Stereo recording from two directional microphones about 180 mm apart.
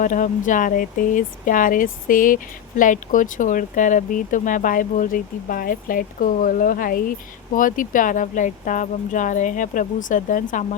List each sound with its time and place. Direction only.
0.0 s speech: 45° left (ahead or behind)